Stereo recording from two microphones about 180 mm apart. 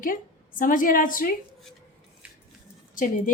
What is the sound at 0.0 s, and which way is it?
A woman's voice, 50° left (ahead or behind).